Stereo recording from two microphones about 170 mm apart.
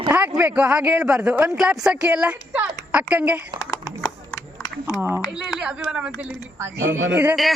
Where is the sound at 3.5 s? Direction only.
20° left (ahead or behind).